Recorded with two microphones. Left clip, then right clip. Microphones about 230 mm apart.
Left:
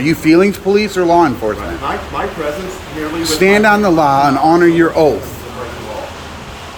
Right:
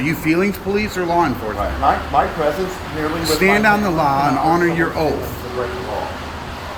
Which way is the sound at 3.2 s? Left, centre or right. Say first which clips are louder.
Left 4 dB; left.